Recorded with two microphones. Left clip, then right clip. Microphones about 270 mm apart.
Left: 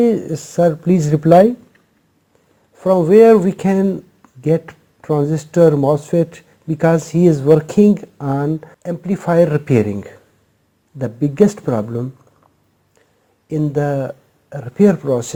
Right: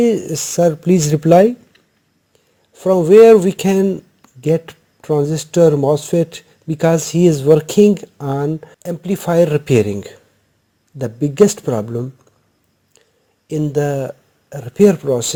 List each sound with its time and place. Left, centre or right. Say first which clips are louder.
0.0 s speech: even; right
2.7 s speech: right 2 dB; right
13.5 s speech: right 1 dB; right